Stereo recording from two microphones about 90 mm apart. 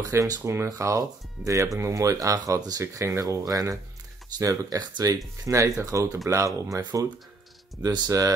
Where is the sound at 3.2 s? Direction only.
45° right (ahead or behind).